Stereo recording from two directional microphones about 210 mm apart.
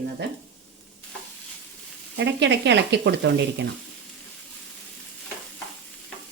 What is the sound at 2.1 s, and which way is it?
Speech, 55° right (ahead or behind).